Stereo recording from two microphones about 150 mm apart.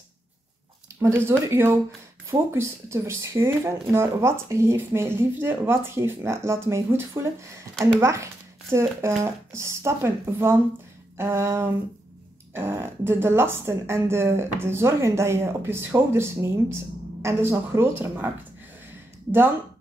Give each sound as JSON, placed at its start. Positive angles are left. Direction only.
{"t": 1.0, "sound": "a woman's voice", "side_deg": -15}